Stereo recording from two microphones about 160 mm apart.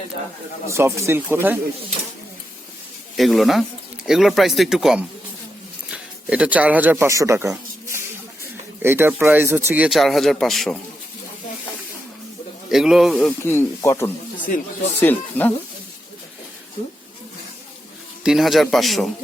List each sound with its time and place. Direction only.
0.7 s speech: 20° right (ahead or behind)
3.2 s speech: centre (ahead or behind); by 7.5 s 20° right (ahead or behind)
7.5 s a sound: 15° right (ahead or behind)
8.8 s speech: 15° right (ahead or behind)
12.6 s speech: 5° right (ahead or behind)
13.4 s speech: 15° left (ahead or behind)
14.3 s speech: 55° left (ahead or behind)
15.0 s speech: 10° left (ahead or behind)
18.2 s speech: centre (ahead or behind)